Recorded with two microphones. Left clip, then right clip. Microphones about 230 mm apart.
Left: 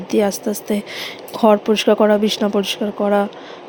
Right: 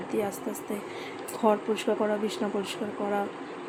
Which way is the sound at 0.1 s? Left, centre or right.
Left.